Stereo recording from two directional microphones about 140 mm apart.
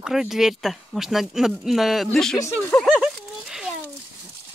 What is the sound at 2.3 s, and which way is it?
Speech, 15° left (ahead or behind).